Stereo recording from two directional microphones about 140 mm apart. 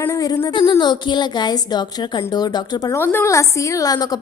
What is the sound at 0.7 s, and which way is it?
A woman's voice, 30° left (ahead or behind).